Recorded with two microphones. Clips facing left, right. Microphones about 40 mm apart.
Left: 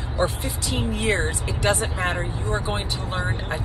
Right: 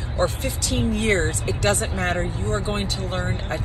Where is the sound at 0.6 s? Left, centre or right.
Left; by 3.2 s centre.